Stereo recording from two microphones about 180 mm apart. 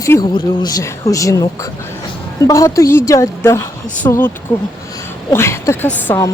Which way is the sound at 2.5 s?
15° left (ahead or behind).